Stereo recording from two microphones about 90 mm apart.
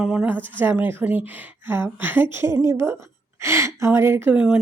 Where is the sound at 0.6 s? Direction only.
25° right (ahead or behind).